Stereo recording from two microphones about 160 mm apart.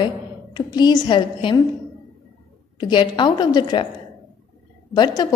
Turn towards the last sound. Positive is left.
turn(degrees=25)  # may be behind; listen again after turning